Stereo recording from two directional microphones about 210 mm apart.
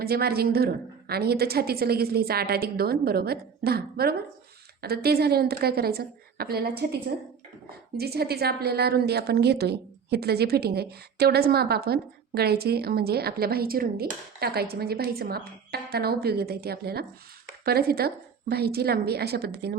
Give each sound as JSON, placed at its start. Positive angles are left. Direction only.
{"t": 0.0, "sound": "a woman's voice", "side_deg": -50}
{"t": 7.9, "sound": "a woman's voice", "side_deg": -50}